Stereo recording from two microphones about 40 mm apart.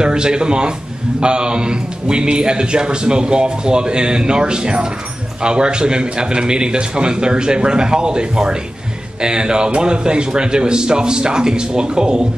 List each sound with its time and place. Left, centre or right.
0.0 s a man's voice: right